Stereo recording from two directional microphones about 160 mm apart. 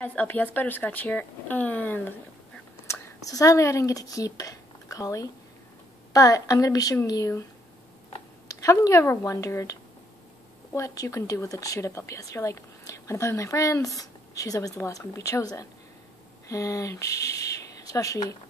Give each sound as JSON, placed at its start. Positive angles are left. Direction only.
{"t": 0.0, "sound": "speech", "side_deg": 10}
{"t": 2.9, "sound": "speech", "side_deg": 20}